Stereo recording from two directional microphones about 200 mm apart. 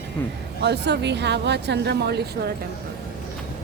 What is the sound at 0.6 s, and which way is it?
Speech, 60° right (ahead or behind).